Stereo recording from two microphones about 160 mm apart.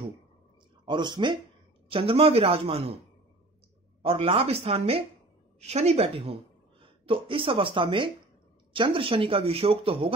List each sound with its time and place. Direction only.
0.8 s speech: 30° right (ahead or behind)
4.0 s speech: 35° right (ahead or behind)